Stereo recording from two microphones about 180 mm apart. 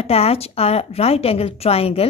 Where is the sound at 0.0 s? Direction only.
35° left (ahead or behind).